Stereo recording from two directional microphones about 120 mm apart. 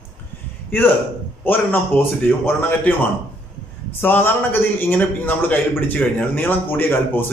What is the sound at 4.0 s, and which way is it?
A man's voice, 15° left (ahead or behind).